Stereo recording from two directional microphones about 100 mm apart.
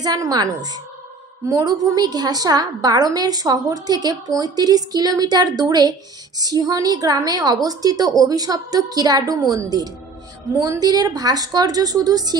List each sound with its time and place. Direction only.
0.0 s a woman's voice: 40° right (ahead or behind)